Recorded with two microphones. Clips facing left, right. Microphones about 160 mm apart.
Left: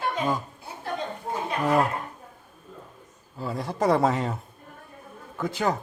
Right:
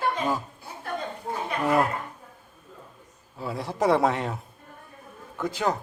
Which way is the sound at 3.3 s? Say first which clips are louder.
Left 1 dB; centre (ahead or behind).